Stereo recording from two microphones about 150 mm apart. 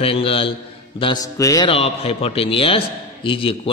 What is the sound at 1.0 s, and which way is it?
Speech, 25° left (ahead or behind).